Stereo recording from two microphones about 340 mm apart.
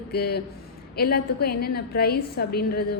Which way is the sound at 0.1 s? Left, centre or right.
Left.